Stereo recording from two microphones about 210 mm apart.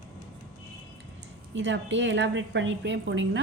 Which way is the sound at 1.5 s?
60° right (ahead or behind).